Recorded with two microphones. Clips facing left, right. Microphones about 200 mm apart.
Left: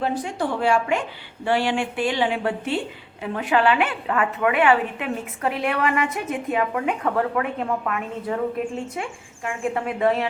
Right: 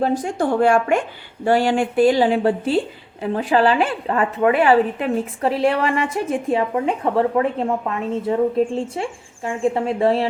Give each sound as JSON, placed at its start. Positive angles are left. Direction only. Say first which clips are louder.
{"t": 0.0, "sound": "a woman's voice", "louder": "right 5 dB", "side_deg": -45}